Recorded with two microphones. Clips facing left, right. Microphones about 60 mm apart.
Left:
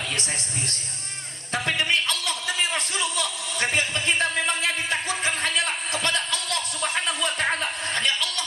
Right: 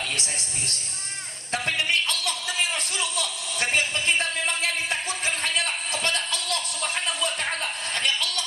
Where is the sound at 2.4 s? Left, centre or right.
Left.